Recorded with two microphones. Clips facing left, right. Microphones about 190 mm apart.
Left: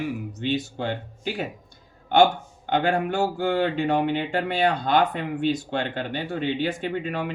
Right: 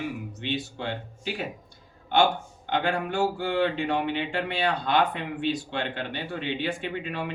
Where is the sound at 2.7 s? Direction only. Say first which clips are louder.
Left 4 dB; 45° left (ahead or behind).